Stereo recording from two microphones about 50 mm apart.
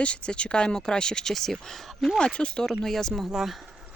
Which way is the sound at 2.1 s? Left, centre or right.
Centre.